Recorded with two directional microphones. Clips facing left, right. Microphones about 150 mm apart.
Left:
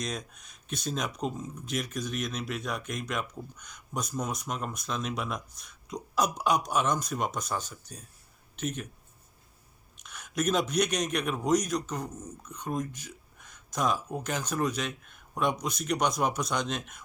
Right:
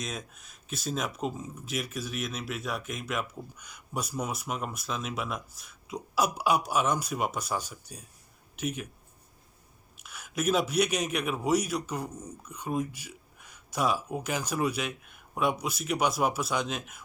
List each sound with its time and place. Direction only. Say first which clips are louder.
0.0 s speech: left 2 dB; 5° right (ahead or behind)
10.0 s a man's voice: left 1 dB; 5° right (ahead or behind)